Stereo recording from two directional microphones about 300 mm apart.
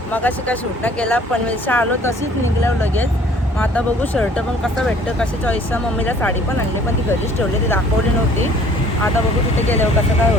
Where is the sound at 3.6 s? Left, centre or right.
Centre.